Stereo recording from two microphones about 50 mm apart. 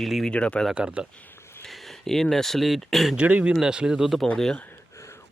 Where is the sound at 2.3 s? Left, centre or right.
Centre.